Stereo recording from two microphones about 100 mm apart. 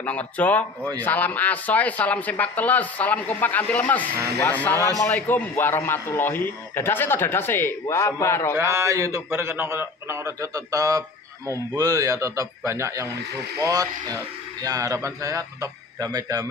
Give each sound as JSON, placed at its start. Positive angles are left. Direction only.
{"t": 0.0, "sound": "speech", "side_deg": 15}
{"t": 4.7, "sound": "a man's voice", "side_deg": -35}
{"t": 5.0, "sound": "a man's voice", "side_deg": 20}
{"t": 8.5, "sound": "a man's voice", "side_deg": -30}